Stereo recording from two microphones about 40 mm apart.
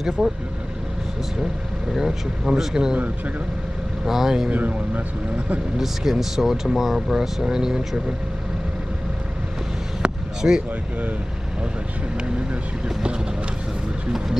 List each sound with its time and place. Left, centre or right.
0.2 s speech: centre
2.0 s speech: centre
4.0 s speech: centre
4.5 s speech: right
5.8 s speech: centre
10.0 s basketball bounce: right
10.4 s speech: right
12.4 s speech: right